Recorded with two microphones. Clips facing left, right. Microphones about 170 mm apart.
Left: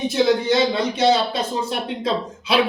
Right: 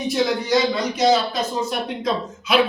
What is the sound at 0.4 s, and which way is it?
Speech, 30° left (ahead or behind).